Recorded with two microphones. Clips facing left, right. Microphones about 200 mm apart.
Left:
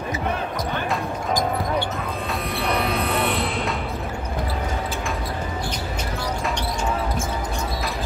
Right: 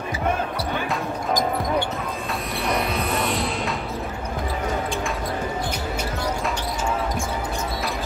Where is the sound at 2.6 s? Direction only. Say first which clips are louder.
Left 1 dB; 60° left (ahead or behind).